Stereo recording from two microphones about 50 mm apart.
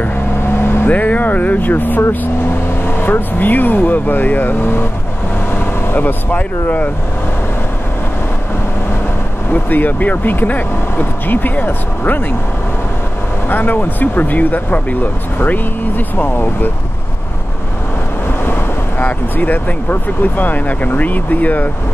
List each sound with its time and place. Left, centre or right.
0.4 s vehicle: left
0.8 s speech: left
9.5 s speech: left
13.5 s speech: left
18.4 s vehicle: left
19.3 s speech: left